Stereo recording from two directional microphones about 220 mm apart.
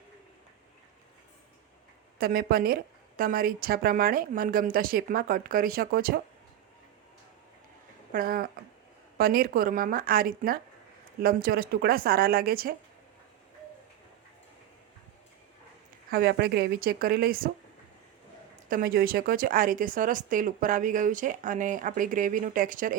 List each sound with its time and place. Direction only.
2.1 s speech: 45° right (ahead or behind)
8.1 s speech: 40° right (ahead or behind)
16.0 s speech: 45° right (ahead or behind)
18.7 s speech: 40° right (ahead or behind)